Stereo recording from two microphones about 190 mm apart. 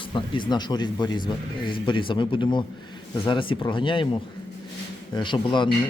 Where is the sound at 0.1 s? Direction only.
25° left (ahead or behind).